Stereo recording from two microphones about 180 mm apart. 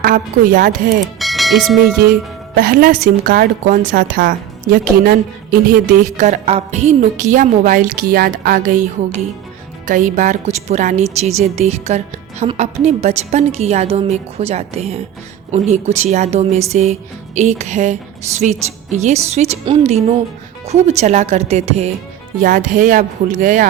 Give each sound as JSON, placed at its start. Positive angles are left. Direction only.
{"t": 0.0, "sound": "a woman's voice", "side_deg": -50}
{"t": 1.2, "sound": "music", "side_deg": 0}
{"t": 2.6, "sound": "a woman's voice", "side_deg": -55}
{"t": 6.1, "sound": "a woman's voice", "side_deg": -40}
{"t": 22.4, "sound": "a woman's voice", "side_deg": -45}